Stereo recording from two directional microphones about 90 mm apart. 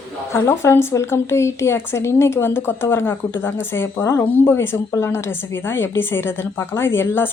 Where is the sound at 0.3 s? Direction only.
30° left (ahead or behind).